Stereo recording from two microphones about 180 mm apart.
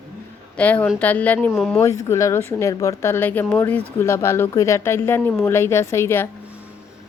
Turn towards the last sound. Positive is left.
turn(degrees=15)  # may be behind; listen again after turning